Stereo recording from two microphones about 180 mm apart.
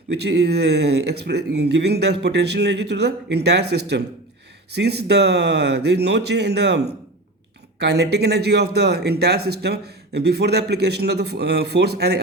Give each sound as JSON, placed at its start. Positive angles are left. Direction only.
{"t": 0.1, "sound": "speech", "side_deg": -70}